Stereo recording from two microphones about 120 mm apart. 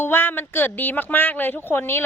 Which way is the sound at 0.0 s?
20° left (ahead or behind).